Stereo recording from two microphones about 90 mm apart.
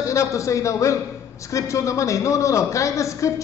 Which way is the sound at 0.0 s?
35° left (ahead or behind).